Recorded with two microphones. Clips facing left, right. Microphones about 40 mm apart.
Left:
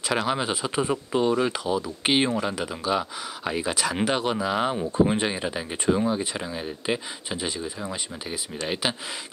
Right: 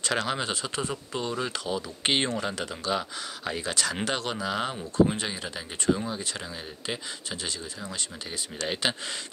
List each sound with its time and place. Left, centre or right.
0.0 s speech: centre
4.9 s speech: left
8.6 s speech: centre